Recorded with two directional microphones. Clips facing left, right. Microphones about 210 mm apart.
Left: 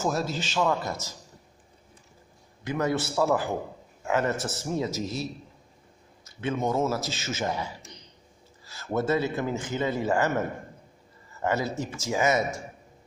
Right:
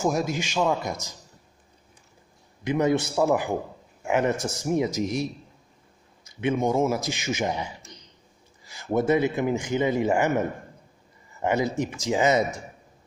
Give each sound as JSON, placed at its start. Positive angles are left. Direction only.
{"t": 0.0, "sound": "a man's voice", "side_deg": -15}
{"t": 2.6, "sound": "a man's voice", "side_deg": -15}